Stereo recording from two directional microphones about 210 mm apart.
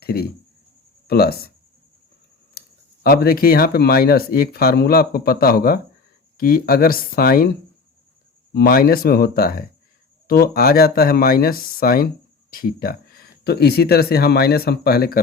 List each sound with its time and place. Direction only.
0.0 s speech: 45° left (ahead or behind)
2.6 s speech: 45° left (ahead or behind)
8.5 s speech: 45° left (ahead or behind)
12.5 s a sound: 45° left (ahead or behind)
13.4 s speech: 50° left (ahead or behind)